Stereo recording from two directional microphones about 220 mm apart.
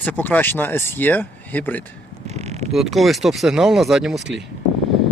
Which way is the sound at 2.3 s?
30° right (ahead or behind).